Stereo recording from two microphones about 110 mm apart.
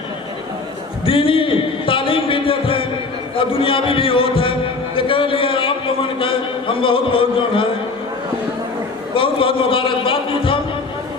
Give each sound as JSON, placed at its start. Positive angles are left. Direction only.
{"t": 1.0, "sound": "a man's voice", "side_deg": 55}
{"t": 9.1, "sound": "a man's voice", "side_deg": 55}